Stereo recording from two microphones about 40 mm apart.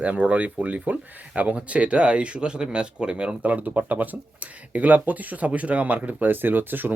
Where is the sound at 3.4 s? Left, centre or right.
Right.